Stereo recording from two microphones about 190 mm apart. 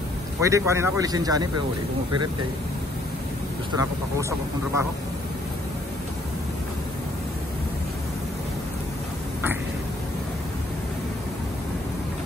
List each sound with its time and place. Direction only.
0.4 s speech: 15° right (ahead or behind)
3.7 s speech: 15° right (ahead or behind)